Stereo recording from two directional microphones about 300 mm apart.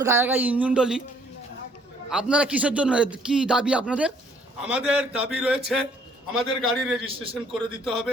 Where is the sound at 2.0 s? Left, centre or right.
Centre.